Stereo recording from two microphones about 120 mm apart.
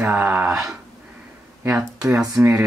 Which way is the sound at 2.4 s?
5° right (ahead or behind).